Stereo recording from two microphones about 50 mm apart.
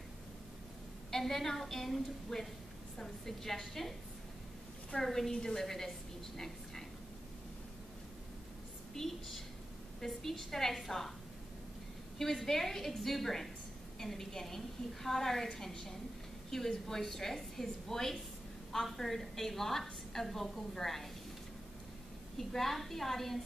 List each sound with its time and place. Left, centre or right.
1.1 s a woman's voice: centre
4.9 s a woman's voice: centre
8.9 s a woman's voice: centre
12.2 s a woman's voice: centre
22.4 s a woman's voice: centre